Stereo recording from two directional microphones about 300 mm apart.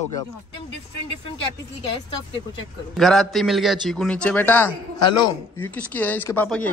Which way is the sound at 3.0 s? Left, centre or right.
Centre.